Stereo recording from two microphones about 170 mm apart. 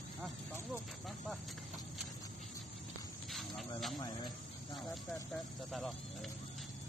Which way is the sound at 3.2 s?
Centre (ahead or behind).